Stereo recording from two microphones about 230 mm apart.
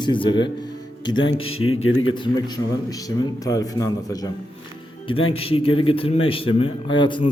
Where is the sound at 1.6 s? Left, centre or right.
Left.